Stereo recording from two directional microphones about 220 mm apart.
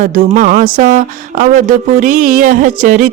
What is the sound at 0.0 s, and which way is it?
Speech, 35° right (ahead or behind).